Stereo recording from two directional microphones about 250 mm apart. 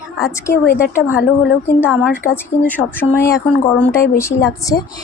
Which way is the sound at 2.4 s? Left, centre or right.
Centre.